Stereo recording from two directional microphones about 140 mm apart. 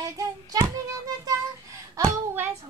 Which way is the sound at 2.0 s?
20° right (ahead or behind).